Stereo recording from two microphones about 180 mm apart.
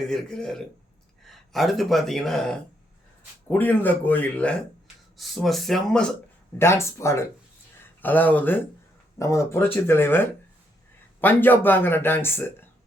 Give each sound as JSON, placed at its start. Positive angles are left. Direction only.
{"t": 0.1, "sound": "speech", "side_deg": 5}
{"t": 6.6, "sound": "speech", "side_deg": 15}